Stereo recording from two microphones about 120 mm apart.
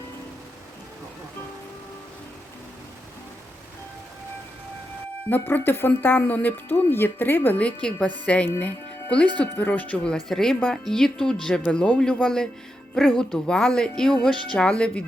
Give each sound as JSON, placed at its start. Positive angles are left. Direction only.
{"t": 5.3, "sound": "speech", "side_deg": 15}